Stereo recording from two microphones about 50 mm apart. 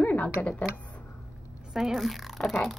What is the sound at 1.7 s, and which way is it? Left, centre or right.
Speech, centre.